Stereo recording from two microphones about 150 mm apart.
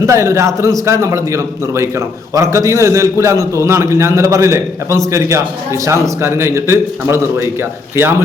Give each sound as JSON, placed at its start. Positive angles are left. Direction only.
{"t": 0.0, "sound": "a man's voice", "side_deg": -20}